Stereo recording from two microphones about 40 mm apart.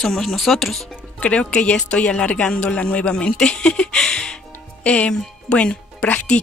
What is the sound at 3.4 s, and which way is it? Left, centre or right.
Music, centre.